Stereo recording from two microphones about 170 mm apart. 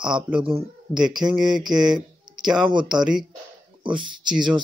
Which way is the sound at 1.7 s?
25° right (ahead or behind).